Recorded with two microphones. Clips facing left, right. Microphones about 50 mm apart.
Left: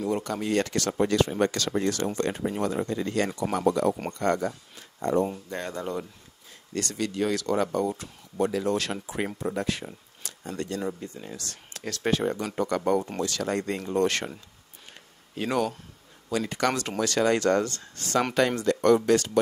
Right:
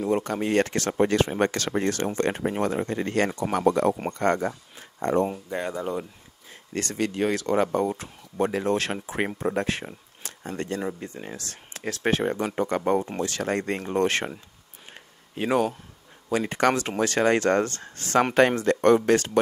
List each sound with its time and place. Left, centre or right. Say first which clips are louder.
0.0 s speech: right 3 dB; right
5.2 s speech: right 3 dB; centre
6.7 s speech: right 2 dB; right
15.0 s a sound: right 3 dB; right
16.3 s speech: right 4 dB; right